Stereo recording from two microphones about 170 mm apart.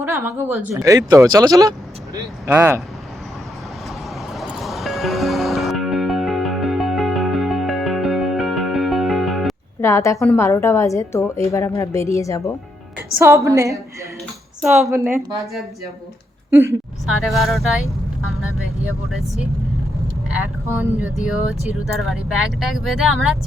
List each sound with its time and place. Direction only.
0.0 s speech: 15° right (ahead or behind)
4.4 s music: centre (ahead or behind)
9.8 s a woman's voice: 15° left (ahead or behind)
13.1 s speech: 15° right (ahead or behind)
14.9 s speech: 15° right (ahead or behind)
16.5 s a woman's voice: 15° right (ahead or behind)
17.1 s speech: centre (ahead or behind)
21.2 s speech: centre (ahead or behind)